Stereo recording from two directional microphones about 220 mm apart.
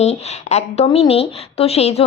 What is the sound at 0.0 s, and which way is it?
A woman's voice, 30° left (ahead or behind).